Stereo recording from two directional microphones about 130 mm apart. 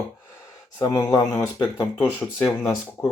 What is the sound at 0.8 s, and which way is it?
Speech, 25° left (ahead or behind).